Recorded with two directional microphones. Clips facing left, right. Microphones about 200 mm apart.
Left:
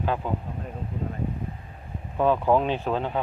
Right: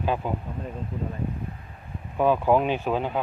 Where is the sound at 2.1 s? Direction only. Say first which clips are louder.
Right 1 dB; 10° right (ahead or behind).